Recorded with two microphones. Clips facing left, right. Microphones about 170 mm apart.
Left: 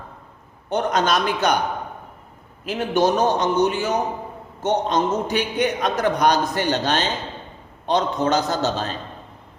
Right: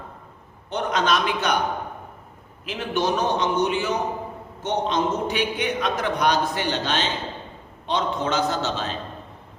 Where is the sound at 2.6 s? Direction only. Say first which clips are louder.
Left 5 dB; 40° left (ahead or behind).